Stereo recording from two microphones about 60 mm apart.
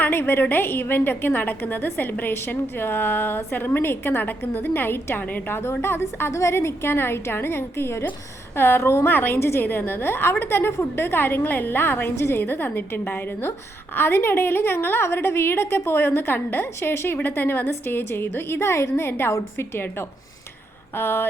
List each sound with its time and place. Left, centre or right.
0.0 s a woman's voice: left
6.3 s a woman's voice: left